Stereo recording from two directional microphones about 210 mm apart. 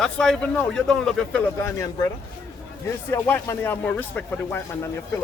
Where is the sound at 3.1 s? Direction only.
10° left (ahead or behind).